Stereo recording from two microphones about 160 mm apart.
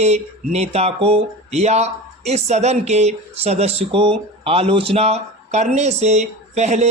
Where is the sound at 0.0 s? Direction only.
45° right (ahead or behind).